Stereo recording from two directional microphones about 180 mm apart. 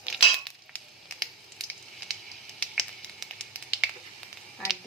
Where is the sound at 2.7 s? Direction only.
Centre (ahead or behind).